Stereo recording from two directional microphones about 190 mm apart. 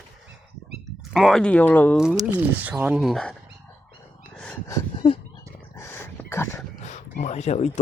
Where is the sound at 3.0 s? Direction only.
Centre (ahead or behind).